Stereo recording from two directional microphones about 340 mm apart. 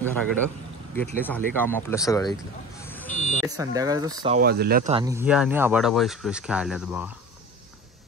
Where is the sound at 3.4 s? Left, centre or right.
Centre.